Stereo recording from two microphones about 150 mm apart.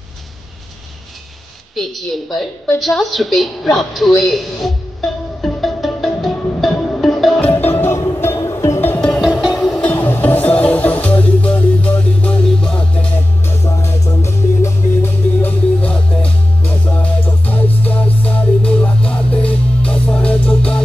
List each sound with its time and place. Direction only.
1.8 s a woman's voice: centre (ahead or behind)
5.4 s music: centre (ahead or behind)
7.5 s music: 15° left (ahead or behind)
9.3 s music: 5° right (ahead or behind)
9.6 s music: 5° left (ahead or behind)
13.7 s music: 20° left (ahead or behind)